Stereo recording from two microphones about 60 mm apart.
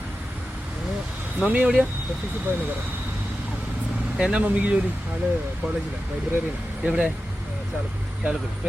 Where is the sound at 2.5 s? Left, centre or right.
Right.